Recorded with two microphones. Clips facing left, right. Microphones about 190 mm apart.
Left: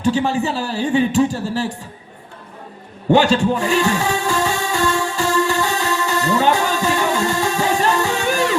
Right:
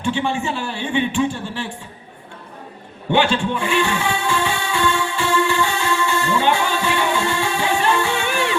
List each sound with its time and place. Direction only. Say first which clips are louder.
0.0 s a man's voice: left 4 dB; 40° left (ahead or behind)
3.1 s music: left 4 dB; 40° left (ahead or behind)